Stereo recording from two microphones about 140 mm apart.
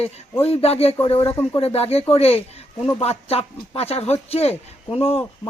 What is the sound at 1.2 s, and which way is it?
Speech, 20° left (ahead or behind).